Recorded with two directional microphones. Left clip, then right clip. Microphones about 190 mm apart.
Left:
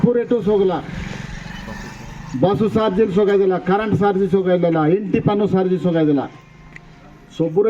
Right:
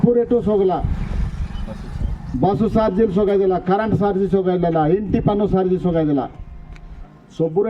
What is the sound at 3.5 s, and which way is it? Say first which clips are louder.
A man's voice: even; 15° right (ahead or behind).